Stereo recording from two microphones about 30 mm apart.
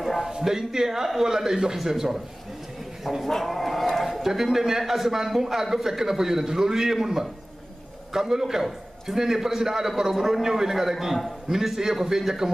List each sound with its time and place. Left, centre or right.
0.2 s a man's voice: centre
3.3 s a sound: centre
4.2 s a man's voice: centre